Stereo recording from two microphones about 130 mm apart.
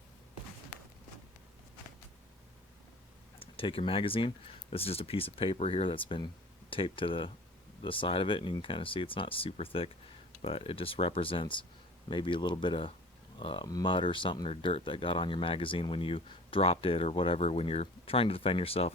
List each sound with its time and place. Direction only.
3.4 s speech: 45° left (ahead or behind)